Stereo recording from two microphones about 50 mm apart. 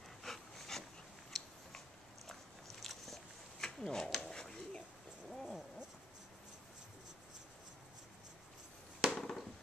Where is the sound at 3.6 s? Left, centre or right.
Centre.